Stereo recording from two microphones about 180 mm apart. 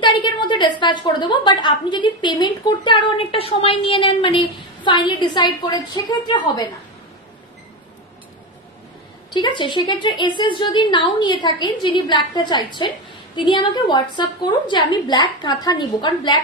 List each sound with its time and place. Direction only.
0.0 s speech: 25° left (ahead or behind)
9.3 s speech: 25° left (ahead or behind)